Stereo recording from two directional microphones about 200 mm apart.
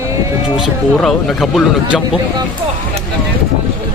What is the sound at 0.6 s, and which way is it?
Speech, centre (ahead or behind).